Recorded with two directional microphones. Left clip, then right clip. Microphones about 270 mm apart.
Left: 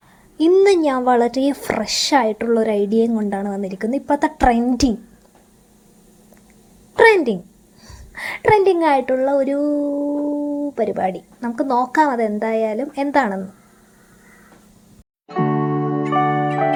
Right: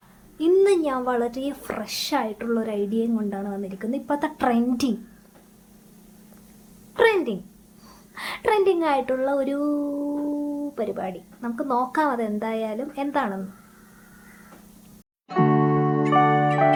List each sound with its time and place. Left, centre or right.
0.3 s speech: centre
6.9 s a sound: left
8.1 s a woman's voice: centre
15.3 s music: centre